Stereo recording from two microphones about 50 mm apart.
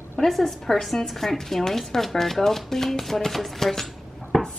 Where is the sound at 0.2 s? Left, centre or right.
Centre.